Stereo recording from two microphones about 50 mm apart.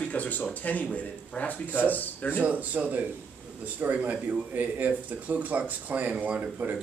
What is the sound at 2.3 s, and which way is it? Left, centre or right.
A man's voice, right.